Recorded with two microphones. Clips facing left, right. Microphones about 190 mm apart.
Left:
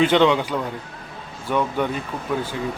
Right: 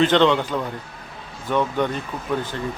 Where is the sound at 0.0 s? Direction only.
10° left (ahead or behind).